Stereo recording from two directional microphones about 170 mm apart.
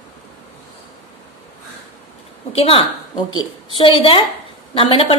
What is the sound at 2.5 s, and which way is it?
A woman's voice, 35° left (ahead or behind).